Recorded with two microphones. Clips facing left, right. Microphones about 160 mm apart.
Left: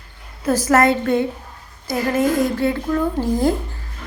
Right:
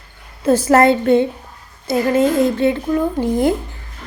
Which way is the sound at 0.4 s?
30° right (ahead or behind).